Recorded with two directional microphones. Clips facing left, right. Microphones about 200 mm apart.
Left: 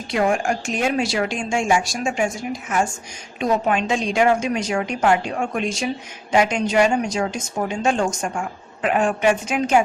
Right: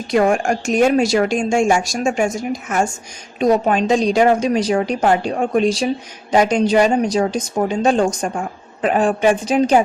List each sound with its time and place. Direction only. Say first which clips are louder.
0.1 s a woman's voice: right 4 dB; 45° right (ahead or behind)